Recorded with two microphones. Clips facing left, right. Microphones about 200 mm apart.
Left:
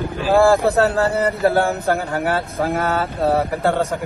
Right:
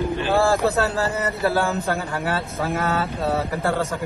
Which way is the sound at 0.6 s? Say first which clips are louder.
Left 4 dB; 60° left (ahead or behind).